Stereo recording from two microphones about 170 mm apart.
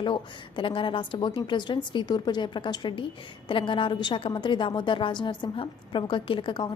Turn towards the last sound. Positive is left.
turn(degrees=30)  # may be behind; listen again after turning